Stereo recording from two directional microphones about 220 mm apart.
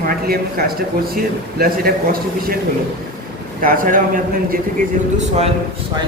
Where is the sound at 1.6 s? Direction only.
40° right (ahead or behind).